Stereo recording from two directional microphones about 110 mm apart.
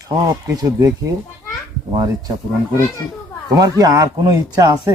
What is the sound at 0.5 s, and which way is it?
Speech, 30° right (ahead or behind).